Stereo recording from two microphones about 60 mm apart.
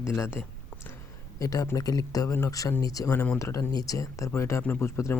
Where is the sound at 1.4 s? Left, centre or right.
Left.